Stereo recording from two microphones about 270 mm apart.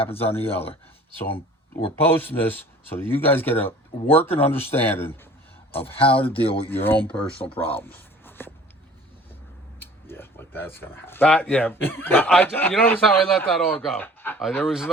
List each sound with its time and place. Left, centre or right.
0.0 s speech: left
1.2 s speech: centre
6.0 s speech: centre
6.7 s speech: centre
9.8 s speech: centre